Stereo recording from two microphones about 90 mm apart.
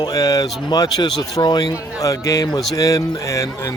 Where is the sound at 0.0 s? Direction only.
45° left (ahead or behind).